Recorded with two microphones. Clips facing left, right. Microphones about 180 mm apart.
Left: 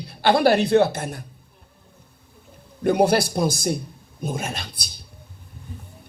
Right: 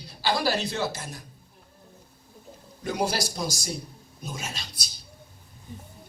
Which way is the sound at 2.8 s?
60° left (ahead or behind).